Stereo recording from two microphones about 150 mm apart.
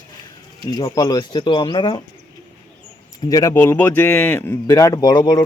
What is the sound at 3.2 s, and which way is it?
Speech, 25° left (ahead or behind).